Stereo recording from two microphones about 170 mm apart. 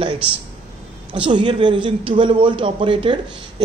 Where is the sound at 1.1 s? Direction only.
30° right (ahead or behind).